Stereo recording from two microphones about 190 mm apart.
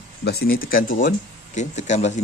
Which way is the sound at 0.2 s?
55° left (ahead or behind).